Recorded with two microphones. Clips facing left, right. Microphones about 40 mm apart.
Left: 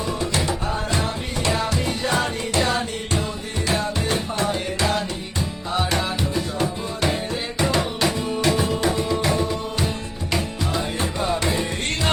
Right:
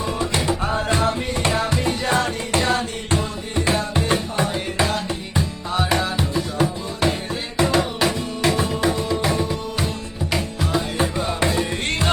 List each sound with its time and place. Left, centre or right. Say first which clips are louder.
0.2 s music: right 3 dB; centre
1.7 s music: right 2 dB; right
2.6 s music: right 1 dB; centre
3.9 s music: right 3 dB; right
6.0 s music: right 1 dB; centre